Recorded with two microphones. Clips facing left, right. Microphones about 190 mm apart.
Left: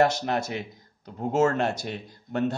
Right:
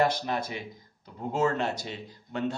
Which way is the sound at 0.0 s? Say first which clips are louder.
Left 4 dB; 75° left (ahead or behind).